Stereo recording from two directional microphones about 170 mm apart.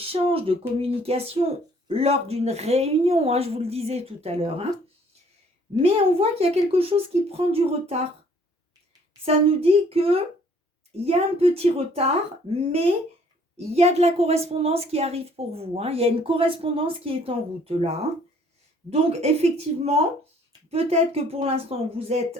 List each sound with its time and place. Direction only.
0.0 s a sound: 35° right (ahead or behind)
0.8 s a woman's voice: 35° right (ahead or behind)
5.8 s a woman's voice: 35° right (ahead or behind)
9.2 s a woman's voice: 35° right (ahead or behind)